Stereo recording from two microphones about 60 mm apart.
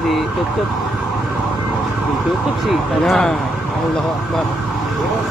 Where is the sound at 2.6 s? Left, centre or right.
Centre.